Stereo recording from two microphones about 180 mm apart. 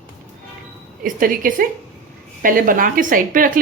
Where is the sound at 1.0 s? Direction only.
50° right (ahead or behind).